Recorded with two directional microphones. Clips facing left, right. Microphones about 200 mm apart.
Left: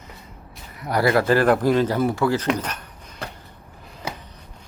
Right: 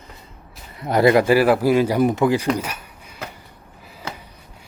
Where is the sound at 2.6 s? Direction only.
10° right (ahead or behind).